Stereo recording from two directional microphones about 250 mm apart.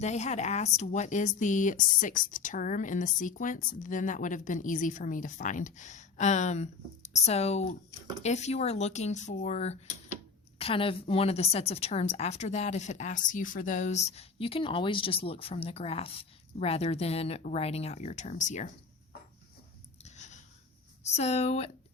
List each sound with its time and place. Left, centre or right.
0.0 s a woman's voice: left
20.1 s a sound: left
21.0 s a woman's voice: left